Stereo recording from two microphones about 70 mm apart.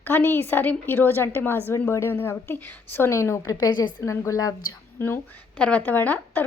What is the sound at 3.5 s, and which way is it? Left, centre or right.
Speech, left.